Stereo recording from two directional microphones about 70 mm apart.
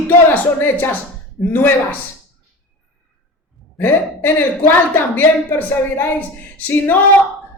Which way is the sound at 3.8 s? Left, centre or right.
Left.